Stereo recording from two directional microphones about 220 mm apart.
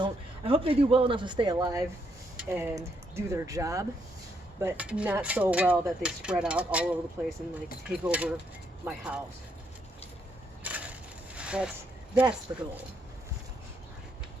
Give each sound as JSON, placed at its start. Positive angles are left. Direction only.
{"t": 0.0, "sound": "speech", "side_deg": -25}
{"t": 10.6, "sound": "crushing", "side_deg": -5}
{"t": 11.3, "sound": "a sound", "side_deg": -5}
{"t": 12.5, "sound": "speech", "side_deg": -15}